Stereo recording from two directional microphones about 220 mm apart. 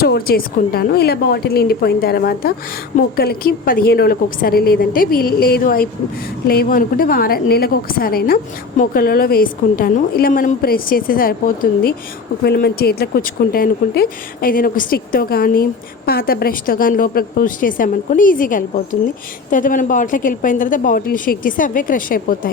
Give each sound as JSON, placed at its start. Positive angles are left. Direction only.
{"t": 0.0, "sound": "a woman's voice", "side_deg": 45}